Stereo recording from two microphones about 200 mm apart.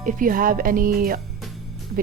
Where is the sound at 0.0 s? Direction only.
45° right (ahead or behind).